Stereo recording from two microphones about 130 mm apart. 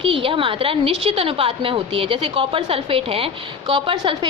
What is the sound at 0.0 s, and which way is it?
A woman's voice, 45° right (ahead or behind).